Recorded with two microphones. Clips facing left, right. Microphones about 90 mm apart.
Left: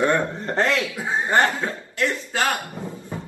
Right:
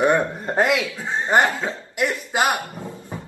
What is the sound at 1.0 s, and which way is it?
Speech, 10° left (ahead or behind).